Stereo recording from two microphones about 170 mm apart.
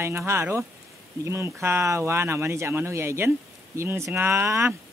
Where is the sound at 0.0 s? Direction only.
15° right (ahead or behind).